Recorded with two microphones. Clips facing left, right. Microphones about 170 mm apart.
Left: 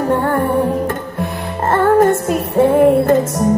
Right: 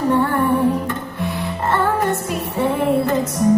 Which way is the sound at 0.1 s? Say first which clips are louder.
Left 1 dB; 45° left (ahead or behind).